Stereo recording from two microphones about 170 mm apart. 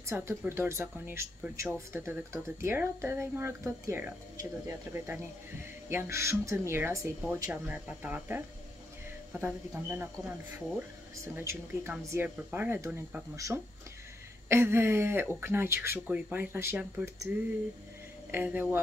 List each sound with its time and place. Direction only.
0.0 s speech: 15° right (ahead or behind)
9.4 s speech: 10° right (ahead or behind)
11.3 s speech: 10° right (ahead or behind)
18.3 s speech: 10° right (ahead or behind)